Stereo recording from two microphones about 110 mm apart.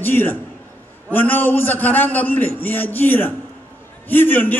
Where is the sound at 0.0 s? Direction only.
15° left (ahead or behind).